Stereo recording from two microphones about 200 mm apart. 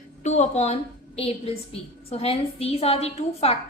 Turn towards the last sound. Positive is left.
turn(degrees=30)  # may be behind; listen again after turning